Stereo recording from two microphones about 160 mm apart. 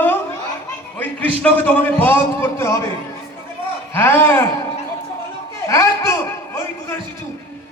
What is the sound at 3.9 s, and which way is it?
Speech, 15° left (ahead or behind).